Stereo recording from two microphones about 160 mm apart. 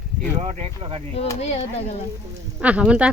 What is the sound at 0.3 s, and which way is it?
Speech, 45° right (ahead or behind).